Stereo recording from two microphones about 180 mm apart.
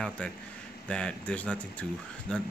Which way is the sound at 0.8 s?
5° left (ahead or behind).